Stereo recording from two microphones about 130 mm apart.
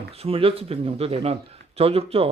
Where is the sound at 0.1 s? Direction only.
50° right (ahead or behind).